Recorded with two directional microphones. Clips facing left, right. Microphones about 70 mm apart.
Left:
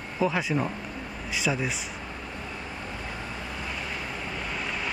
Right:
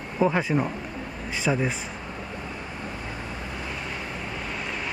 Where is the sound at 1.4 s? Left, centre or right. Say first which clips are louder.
Right 4 dB; right.